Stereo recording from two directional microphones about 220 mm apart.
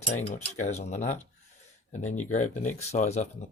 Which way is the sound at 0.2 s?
30° left (ahead or behind).